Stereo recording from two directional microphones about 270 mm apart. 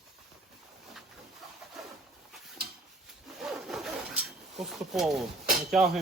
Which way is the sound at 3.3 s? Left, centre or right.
Centre.